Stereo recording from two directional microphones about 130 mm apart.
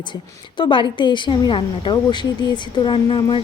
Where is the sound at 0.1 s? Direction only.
40° left (ahead or behind).